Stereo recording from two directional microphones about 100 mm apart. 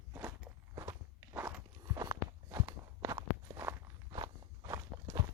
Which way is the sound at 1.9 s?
40° right (ahead or behind).